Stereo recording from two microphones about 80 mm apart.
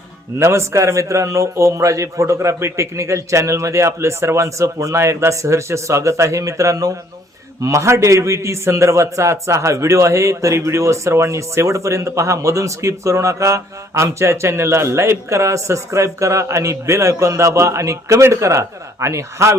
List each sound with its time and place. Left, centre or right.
0.3 s a man's voice: right